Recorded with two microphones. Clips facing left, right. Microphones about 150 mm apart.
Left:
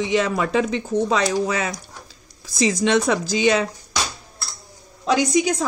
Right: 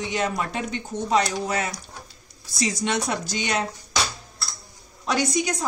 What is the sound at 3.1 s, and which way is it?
Speech, 90° left.